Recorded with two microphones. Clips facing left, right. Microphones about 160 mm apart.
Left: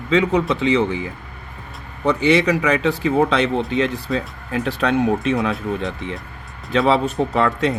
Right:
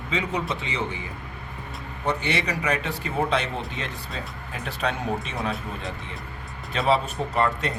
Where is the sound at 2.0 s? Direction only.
90° left.